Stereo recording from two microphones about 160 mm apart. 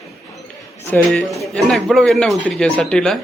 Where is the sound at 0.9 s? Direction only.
5° left (ahead or behind).